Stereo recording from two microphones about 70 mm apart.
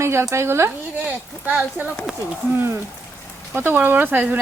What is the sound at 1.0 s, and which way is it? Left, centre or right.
Speech, right.